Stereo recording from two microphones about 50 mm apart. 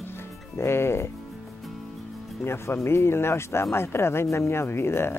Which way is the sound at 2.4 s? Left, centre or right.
Left.